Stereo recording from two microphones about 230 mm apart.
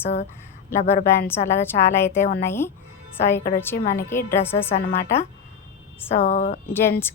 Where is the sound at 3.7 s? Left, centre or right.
Left.